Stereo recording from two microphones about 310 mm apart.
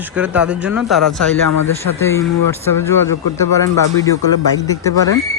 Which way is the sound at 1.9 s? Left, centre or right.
Left.